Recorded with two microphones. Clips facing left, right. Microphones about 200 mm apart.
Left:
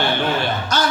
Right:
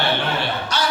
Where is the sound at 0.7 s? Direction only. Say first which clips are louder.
Left 4 dB; 45° left (ahead or behind).